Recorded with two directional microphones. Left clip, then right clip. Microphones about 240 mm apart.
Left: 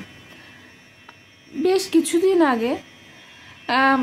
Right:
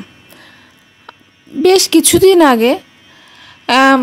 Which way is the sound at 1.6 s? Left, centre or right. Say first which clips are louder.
Right 10 dB; right.